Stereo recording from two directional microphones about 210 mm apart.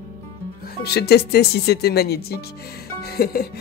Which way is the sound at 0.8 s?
50° left (ahead or behind).